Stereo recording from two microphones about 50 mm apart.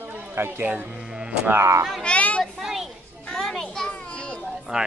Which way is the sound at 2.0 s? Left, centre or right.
Left.